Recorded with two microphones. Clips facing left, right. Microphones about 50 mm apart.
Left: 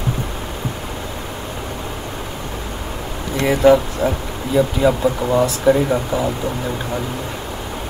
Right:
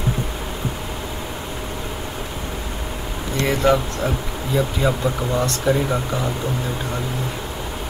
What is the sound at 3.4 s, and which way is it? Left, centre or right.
Speech, centre.